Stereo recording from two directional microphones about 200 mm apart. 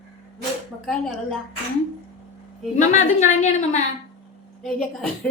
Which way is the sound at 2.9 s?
35° left (ahead or behind).